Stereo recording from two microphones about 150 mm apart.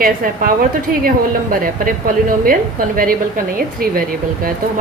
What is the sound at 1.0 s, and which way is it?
A woman's voice, 70° right (ahead or behind).